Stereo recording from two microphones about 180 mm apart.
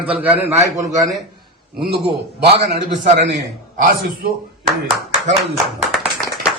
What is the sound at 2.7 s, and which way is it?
Speech, 40° right (ahead or behind).